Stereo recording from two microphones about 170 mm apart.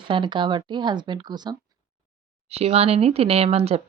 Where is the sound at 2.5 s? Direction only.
35° right (ahead or behind).